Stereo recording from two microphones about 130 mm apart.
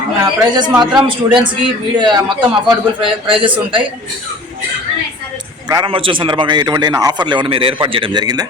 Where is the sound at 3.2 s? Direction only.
40° right (ahead or behind).